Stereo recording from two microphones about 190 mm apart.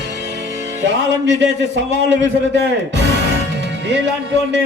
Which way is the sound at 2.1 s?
65° right (ahead or behind).